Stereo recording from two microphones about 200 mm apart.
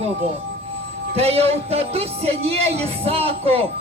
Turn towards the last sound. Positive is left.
turn(degrees=-30)  # may be behind; listen again after turning